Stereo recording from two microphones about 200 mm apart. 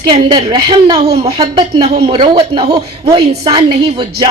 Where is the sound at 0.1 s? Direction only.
20° right (ahead or behind).